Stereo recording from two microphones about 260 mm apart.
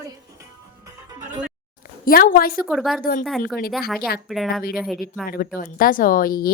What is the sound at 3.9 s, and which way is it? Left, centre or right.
Speech, left.